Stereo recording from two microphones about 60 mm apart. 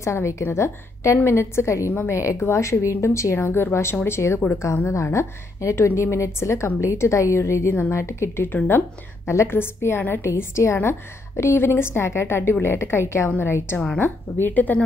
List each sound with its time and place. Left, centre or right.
0.0 s a woman's voice: left
8.5 s a woman's voice: left